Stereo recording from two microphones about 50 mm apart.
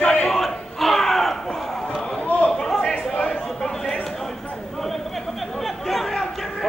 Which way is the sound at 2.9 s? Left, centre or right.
Left.